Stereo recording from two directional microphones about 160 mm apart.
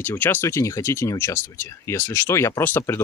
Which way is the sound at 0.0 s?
10° left (ahead or behind).